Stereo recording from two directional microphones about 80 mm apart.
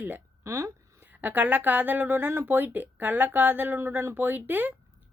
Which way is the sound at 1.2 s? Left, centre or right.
Right.